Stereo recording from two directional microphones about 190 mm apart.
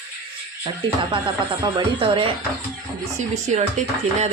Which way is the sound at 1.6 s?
25° right (ahead or behind).